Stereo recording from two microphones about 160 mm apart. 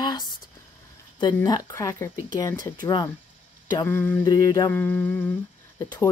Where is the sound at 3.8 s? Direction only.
15° left (ahead or behind).